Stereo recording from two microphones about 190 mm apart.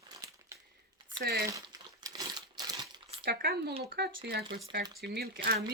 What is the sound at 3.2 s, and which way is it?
Speech, 55° right (ahead or behind).